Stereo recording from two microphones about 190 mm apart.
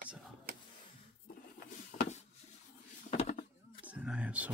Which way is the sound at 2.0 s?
35° left (ahead or behind).